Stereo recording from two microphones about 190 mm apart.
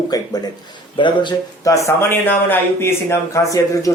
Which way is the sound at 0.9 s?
25° left (ahead or behind).